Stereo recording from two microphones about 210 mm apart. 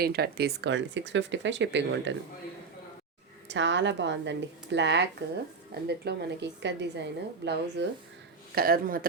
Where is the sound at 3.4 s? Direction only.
60° right (ahead or behind).